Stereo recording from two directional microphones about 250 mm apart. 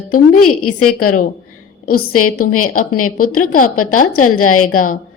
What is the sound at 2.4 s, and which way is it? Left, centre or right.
Speech, left.